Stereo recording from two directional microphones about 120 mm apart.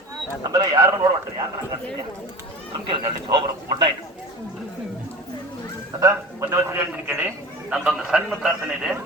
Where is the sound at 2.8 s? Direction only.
40° right (ahead or behind).